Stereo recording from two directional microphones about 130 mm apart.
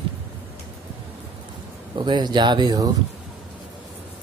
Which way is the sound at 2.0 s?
35° right (ahead or behind).